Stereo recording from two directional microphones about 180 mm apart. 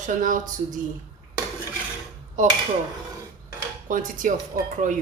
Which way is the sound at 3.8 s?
50° right (ahead or behind).